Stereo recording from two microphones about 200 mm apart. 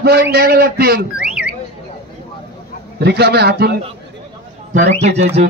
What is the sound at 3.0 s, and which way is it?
Music, 55° right (ahead or behind).